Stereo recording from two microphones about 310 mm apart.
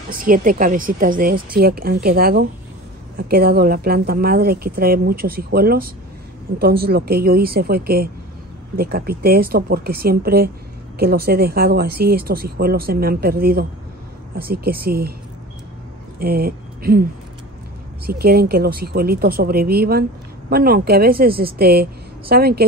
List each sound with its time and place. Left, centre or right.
0.1 s speech: right
16.2 s speech: right
18.0 s speech: right